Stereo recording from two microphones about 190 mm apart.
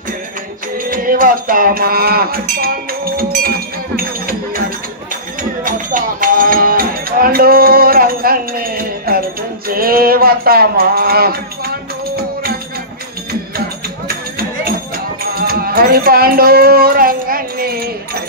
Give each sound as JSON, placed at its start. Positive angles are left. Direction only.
{"t": 0.7, "sound": "music", "side_deg": -45}
{"t": 9.7, "sound": "a sound", "side_deg": -50}
{"t": 15.3, "sound": "music", "side_deg": -50}